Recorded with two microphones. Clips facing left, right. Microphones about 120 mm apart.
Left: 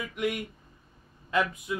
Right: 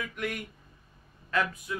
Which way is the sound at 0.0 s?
20° left (ahead or behind).